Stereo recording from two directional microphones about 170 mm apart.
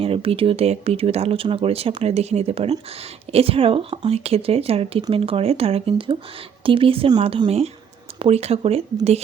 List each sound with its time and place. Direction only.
0.0 s speech: 35° right (ahead or behind)